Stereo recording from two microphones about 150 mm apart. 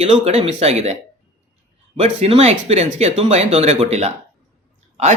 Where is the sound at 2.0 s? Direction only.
45° right (ahead or behind).